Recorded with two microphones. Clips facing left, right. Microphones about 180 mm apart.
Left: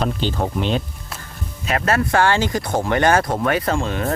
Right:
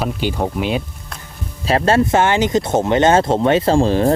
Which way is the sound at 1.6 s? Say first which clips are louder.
Right 5 dB; 30° right (ahead or behind).